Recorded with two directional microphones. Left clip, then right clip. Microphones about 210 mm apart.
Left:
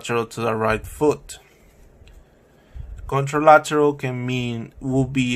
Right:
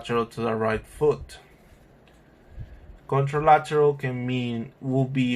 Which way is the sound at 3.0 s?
60° left (ahead or behind).